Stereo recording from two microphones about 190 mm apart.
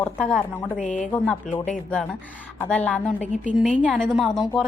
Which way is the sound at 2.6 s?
5° left (ahead or behind).